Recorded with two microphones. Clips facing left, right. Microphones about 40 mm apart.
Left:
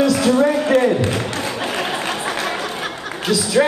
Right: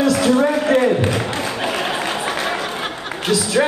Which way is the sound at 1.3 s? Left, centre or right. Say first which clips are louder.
Right 1 dB; right.